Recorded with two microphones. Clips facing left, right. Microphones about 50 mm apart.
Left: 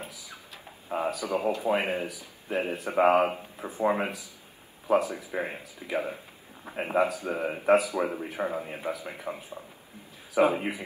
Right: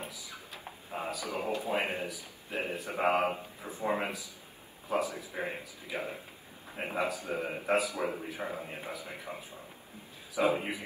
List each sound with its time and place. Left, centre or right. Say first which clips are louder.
0.0 s a sound: left 1 dB; left
1.1 s a man's voice: left 6 dB; left
10.3 s speech: left 5 dB; left